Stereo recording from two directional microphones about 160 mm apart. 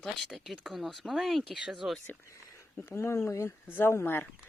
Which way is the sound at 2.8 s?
15° left (ahead or behind).